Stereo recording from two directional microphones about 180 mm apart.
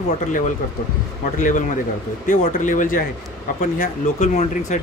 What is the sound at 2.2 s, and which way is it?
Speech, 45° left (ahead or behind).